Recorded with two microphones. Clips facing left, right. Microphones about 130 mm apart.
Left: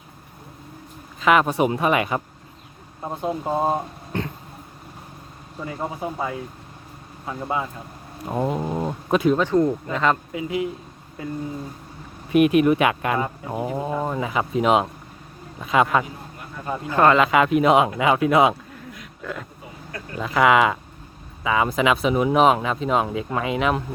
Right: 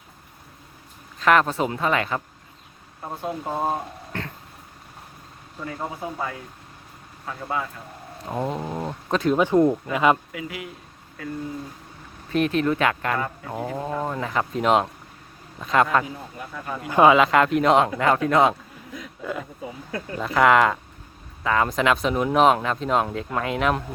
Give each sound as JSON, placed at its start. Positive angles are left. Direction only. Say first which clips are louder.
{"t": 1.2, "sound": "speech", "louder": "left 1 dB", "side_deg": 5}
{"t": 5.5, "sound": "speech", "louder": "left 2 dB", "side_deg": 15}
{"t": 8.3, "sound": "speech", "louder": "left 3 dB", "side_deg": 5}
{"t": 9.3, "sound": "speech", "louder": "right 1 dB", "side_deg": -15}
{"t": 10.3, "sound": "speech", "louder": "left 8 dB", "side_deg": 25}
{"t": 12.3, "sound": "speech", "louder": "left 6 dB", "side_deg": 10}
{"t": 16.9, "sound": "speech", "louder": "right 1 dB", "side_deg": -10}
{"t": 19.2, "sound": "speech", "louder": "right 2 dB", "side_deg": -5}